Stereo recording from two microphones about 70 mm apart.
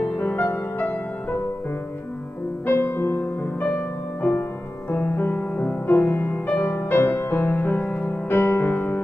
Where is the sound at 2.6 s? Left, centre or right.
Left.